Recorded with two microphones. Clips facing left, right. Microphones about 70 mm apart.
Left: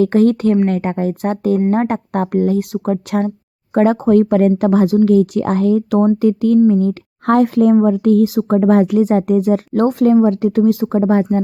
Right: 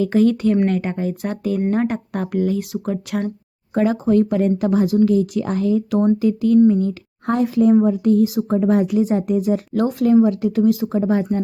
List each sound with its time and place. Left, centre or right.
0.0 s speech: left
3.8 s speech: left
10.8 s speech: left